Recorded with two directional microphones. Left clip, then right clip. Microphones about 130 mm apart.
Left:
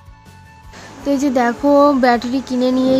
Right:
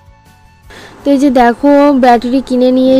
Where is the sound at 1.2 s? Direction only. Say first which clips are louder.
Right 8 dB; 30° right (ahead or behind).